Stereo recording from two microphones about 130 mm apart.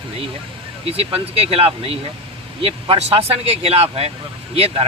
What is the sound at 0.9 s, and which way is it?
Speech, 50° right (ahead or behind).